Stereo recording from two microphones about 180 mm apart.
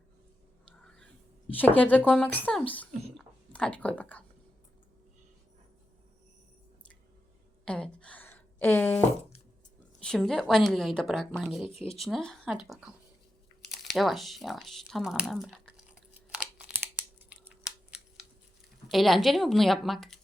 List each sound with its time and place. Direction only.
0.8 s whispering: 5° left (ahead or behind)
1.5 s speech: 10° left (ahead or behind)
7.6 s a sound: 5° left (ahead or behind)
10.0 s a woman's voice: 5° left (ahead or behind)
11.7 s speech: 35° left (ahead or behind)
11.9 s a woman's voice: centre (ahead or behind)
16.3 s a sound: 5° right (ahead or behind)
18.9 s a woman's voice: centre (ahead or behind)